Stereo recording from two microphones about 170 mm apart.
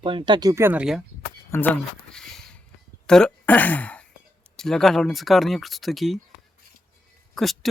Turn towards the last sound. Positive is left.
turn(degrees=0)  # may be behind; listen again after turning